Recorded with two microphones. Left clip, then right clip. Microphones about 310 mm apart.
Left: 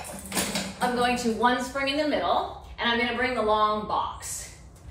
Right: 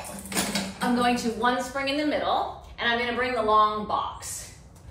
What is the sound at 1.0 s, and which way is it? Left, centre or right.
A woman's voice, centre.